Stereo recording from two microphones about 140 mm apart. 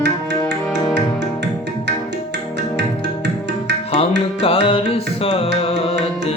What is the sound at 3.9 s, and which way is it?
Music, 40° left (ahead or behind).